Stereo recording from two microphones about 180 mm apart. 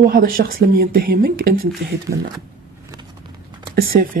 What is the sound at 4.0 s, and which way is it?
Speech, 60° right (ahead or behind).